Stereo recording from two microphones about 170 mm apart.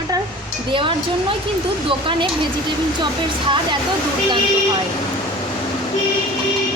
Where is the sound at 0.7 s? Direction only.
30° right (ahead or behind).